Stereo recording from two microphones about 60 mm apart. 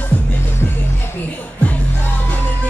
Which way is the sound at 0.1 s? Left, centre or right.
Left.